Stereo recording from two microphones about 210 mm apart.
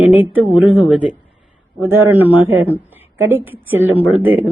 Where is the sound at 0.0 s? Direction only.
10° right (ahead or behind).